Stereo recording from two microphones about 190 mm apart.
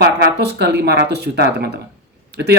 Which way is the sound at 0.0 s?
60° right (ahead or behind).